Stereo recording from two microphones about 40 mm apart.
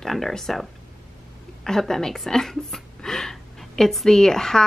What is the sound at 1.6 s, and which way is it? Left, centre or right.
A woman's voice, centre.